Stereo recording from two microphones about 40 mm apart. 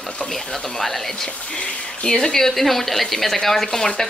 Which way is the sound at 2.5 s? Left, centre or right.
Centre.